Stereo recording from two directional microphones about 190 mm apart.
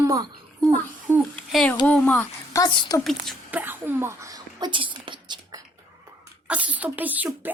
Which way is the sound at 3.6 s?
10° right (ahead or behind).